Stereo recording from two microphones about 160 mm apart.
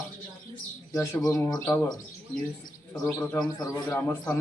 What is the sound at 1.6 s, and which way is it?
Speech, 10° left (ahead or behind).